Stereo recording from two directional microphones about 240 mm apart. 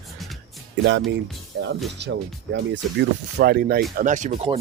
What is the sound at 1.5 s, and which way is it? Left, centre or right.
Speech, right.